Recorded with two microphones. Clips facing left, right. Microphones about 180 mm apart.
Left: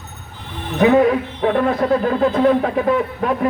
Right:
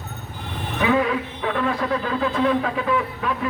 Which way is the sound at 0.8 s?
50° left (ahead or behind).